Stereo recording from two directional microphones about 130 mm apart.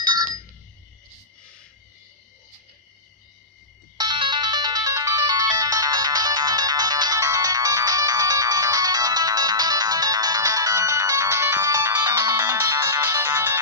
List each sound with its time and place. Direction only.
0.0 s ringtone: 30° right (ahead or behind)
4.0 s ringtone: 35° right (ahead or behind); by 13.6 s 20° right (ahead or behind)